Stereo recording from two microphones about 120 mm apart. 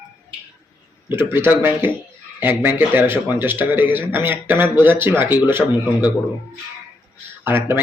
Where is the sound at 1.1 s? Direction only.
20° right (ahead or behind).